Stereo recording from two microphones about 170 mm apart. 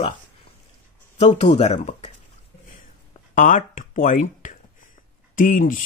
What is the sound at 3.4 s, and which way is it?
Speech, 50° left (ahead or behind).